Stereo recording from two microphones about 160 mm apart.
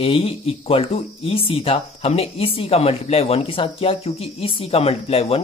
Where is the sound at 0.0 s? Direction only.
35° left (ahead or behind).